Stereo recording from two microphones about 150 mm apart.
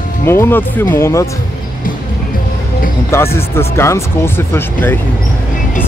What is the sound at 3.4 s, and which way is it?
Speech, 15° left (ahead or behind).